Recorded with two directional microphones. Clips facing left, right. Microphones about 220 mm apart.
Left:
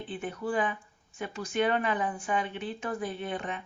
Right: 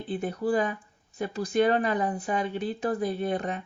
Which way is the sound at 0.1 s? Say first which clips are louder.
Right 6 dB; 40° right (ahead or behind).